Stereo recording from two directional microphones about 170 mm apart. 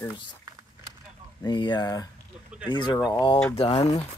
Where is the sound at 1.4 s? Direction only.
25° left (ahead or behind).